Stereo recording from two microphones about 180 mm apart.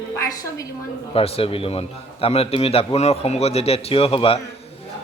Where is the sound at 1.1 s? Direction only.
30° left (ahead or behind).